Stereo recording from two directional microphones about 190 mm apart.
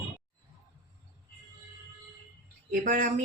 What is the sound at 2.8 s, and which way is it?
Speech, 45° right (ahead or behind).